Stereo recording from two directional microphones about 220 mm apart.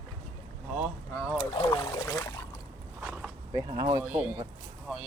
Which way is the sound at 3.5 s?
20° right (ahead or behind).